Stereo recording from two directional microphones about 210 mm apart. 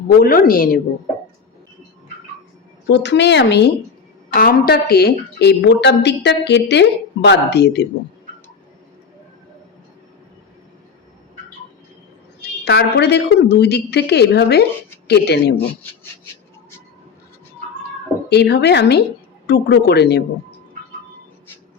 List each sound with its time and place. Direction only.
0.2 s a woman's voice: 45° left (ahead or behind)
2.9 s a woman's voice: 55° left (ahead or behind)
4.4 s a woman's voice: 45° left (ahead or behind)
12.6 s a woman's voice: 55° left (ahead or behind)
18.3 s a woman's voice: 50° left (ahead or behind)